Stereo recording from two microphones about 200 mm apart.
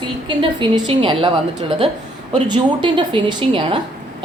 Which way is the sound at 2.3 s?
20° right (ahead or behind).